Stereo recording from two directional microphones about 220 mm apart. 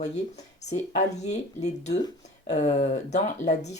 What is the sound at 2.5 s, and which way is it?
Speech, 30° left (ahead or behind).